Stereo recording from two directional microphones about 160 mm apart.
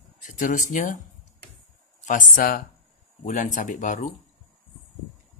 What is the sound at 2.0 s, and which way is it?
Speech, 60° left (ahead or behind).